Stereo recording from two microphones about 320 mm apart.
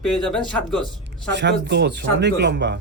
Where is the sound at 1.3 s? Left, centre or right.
Right.